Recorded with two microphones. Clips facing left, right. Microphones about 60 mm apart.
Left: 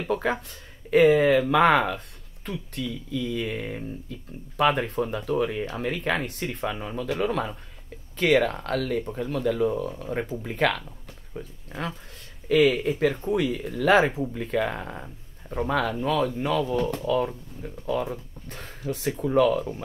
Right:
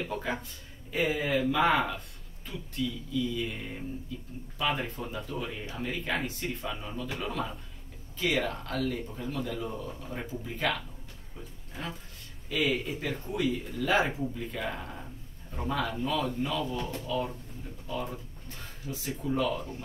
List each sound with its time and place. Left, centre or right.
0.1 s speech: left
12.4 s speech: left